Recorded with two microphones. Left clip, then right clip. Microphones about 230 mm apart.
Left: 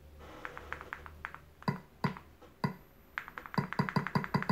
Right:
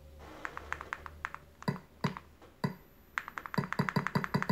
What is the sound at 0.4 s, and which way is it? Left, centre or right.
Music, right.